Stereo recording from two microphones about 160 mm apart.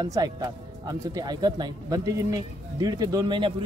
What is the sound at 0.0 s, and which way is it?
Speech, 25° right (ahead or behind).